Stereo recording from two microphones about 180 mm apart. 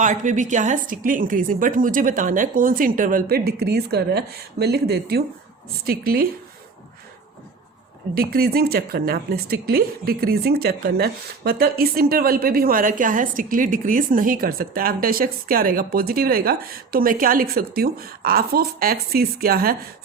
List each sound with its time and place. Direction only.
0.0 s a woman's voice: 45° right (ahead or behind)
8.1 s speech: 60° right (ahead or behind)